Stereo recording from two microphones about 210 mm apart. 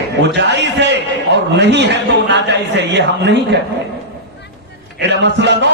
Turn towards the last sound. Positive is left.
turn(degrees=-55)  # may be behind; listen again after turning